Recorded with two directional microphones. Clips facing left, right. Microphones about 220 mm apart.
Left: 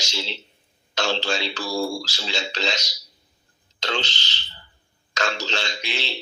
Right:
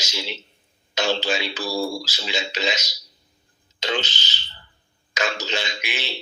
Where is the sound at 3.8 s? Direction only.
15° right (ahead or behind).